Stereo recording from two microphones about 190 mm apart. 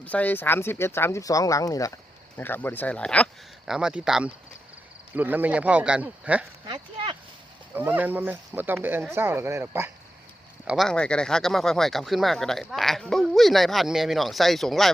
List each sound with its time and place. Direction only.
0.0 s speech: 10° left (ahead or behind)
6.7 s speech: 30° right (ahead or behind)
7.7 s speech: 10° right (ahead or behind)
10.7 s speech: centre (ahead or behind)